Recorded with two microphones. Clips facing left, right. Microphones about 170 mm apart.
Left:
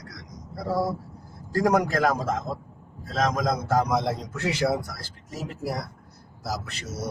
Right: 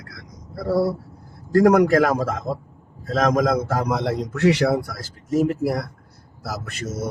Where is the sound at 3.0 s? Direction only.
50° right (ahead or behind); by 4.9 s 70° right (ahead or behind).